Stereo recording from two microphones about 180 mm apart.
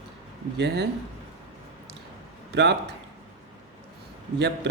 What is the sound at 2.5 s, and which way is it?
Speech, 70° right (ahead or behind).